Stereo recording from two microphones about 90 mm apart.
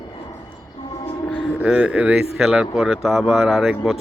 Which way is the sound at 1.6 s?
10° right (ahead or behind).